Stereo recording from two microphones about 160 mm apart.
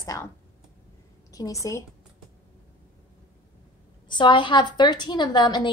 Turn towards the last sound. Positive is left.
turn(degrees=25)  # may be behind; listen again after turning